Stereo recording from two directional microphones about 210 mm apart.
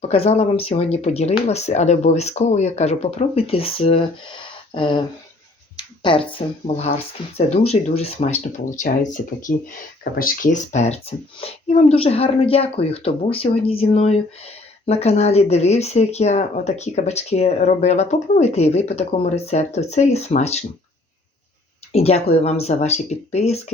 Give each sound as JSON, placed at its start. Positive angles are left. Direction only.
{"t": 0.1, "sound": "speech", "side_deg": 30}
{"t": 6.0, "sound": "speech", "side_deg": 25}
{"t": 7.3, "sound": "speech", "side_deg": 30}
{"t": 21.9, "sound": "speech", "side_deg": 30}